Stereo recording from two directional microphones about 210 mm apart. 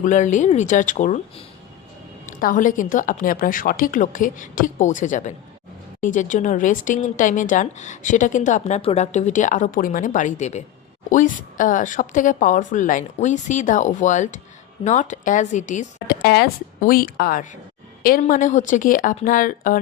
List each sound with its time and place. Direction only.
0.0 s a woman's voice: 35° left (ahead or behind)
2.4 s a woman's voice: 40° left (ahead or behind)
16.2 s a woman's voice: 50° left (ahead or behind)